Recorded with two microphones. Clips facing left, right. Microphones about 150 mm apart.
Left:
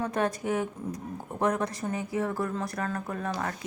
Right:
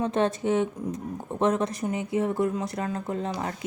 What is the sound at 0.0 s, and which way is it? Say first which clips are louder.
Speech: right 4 dB; 25° right (ahead or behind).